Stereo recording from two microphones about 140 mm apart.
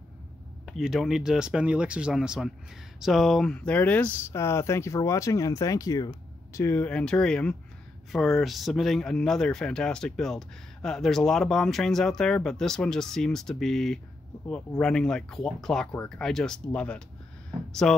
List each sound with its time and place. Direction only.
0.7 s speech: centre (ahead or behind)